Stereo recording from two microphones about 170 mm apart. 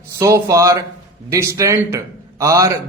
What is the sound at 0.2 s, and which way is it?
A man's voice, 20° right (ahead or behind).